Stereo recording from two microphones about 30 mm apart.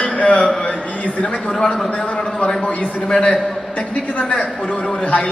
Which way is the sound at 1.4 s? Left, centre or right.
Left.